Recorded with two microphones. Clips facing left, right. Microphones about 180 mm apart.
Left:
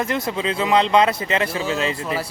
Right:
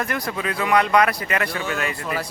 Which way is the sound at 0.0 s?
20° left (ahead or behind).